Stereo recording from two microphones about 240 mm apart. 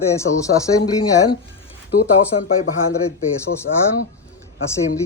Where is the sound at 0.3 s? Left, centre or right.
Left.